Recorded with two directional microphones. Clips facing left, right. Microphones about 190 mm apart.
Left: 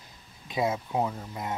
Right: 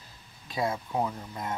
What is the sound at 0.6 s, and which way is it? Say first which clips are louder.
Speech: left 1 dB; 5° left (ahead or behind).